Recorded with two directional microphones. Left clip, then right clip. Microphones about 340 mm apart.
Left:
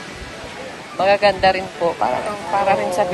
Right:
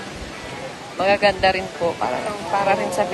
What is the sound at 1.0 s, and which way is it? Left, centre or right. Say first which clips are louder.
Speech: left 2 dB; centre.